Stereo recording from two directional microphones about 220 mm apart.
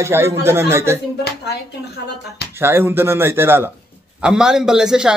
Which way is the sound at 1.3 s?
45° left (ahead or behind).